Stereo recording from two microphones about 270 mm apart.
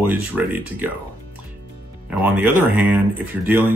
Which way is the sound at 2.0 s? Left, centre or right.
Centre.